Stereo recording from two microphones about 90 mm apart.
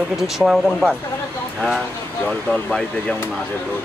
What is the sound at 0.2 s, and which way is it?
Speech, centre (ahead or behind).